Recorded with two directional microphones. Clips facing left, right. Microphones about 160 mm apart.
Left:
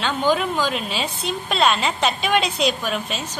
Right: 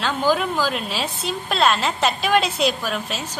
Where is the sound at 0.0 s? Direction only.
5° right (ahead or behind).